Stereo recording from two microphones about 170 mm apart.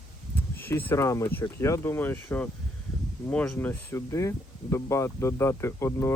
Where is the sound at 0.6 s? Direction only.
10° left (ahead or behind).